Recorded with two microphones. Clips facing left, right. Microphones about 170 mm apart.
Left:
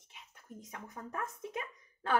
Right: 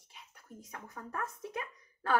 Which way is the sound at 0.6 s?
20° left (ahead or behind).